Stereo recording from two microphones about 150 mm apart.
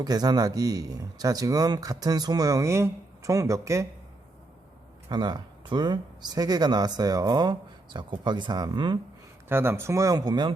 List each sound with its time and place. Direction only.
0.0 s speech: 25° right (ahead or behind)
5.0 s speech: 30° right (ahead or behind)
9.5 s speech: 15° right (ahead or behind)